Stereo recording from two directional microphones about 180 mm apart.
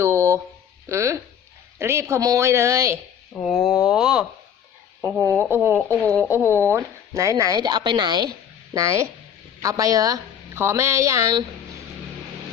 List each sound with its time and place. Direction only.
0.0 s a sound: 15° right (ahead or behind)
0.9 s a woman's voice: 15° right (ahead or behind)
3.4 s a woman's voice: centre (ahead or behind)
6.0 s speech: 10° left (ahead or behind)
6.3 s a woman's voice: 10° right (ahead or behind)